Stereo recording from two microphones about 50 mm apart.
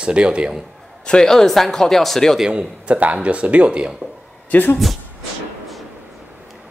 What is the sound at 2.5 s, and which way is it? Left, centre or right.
Speech, right.